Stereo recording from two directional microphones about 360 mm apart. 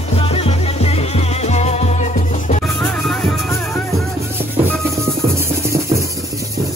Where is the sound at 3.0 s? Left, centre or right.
Centre.